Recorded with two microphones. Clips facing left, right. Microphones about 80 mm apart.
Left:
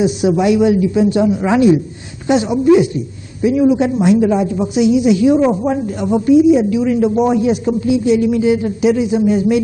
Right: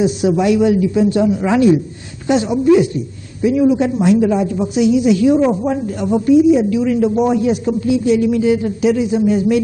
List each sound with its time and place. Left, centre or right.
0.0 s speech: centre